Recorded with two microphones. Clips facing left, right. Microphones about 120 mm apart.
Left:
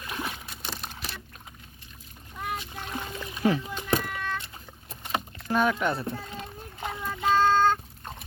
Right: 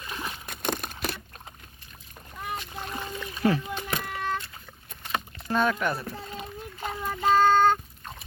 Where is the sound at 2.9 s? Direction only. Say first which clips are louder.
Left 1 dB; 5° left (ahead or behind).